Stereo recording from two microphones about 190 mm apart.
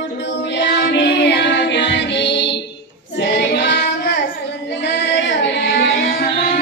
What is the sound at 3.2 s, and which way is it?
Child singing, 65° left (ahead or behind).